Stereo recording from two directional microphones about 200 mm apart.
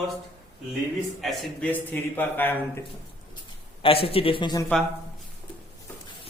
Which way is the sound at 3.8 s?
30° left (ahead or behind).